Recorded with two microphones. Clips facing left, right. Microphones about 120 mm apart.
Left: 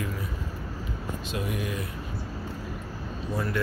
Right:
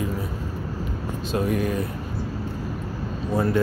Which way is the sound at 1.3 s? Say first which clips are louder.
Right 9 dB; 45° right (ahead or behind).